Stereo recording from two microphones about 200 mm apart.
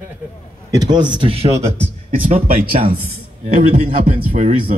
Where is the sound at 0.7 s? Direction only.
20° right (ahead or behind).